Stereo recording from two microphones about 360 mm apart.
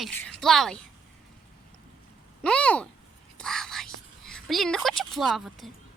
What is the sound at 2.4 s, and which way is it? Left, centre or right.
Speech, centre.